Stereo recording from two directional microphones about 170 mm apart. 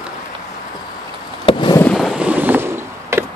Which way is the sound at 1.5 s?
30° left (ahead or behind).